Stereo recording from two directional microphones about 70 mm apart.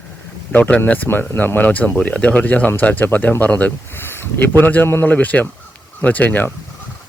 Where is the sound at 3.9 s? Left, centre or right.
Left.